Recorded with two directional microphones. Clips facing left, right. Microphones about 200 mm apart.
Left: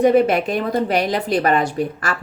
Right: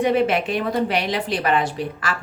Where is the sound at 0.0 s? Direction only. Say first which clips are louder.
Left 4 dB; 40° left (ahead or behind).